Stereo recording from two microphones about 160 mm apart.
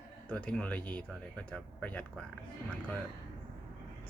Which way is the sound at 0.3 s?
5° left (ahead or behind).